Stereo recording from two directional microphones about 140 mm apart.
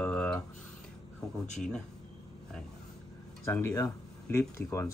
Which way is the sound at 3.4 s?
20° left (ahead or behind).